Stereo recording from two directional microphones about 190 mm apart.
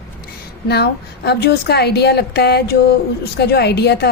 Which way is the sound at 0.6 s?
60° left (ahead or behind).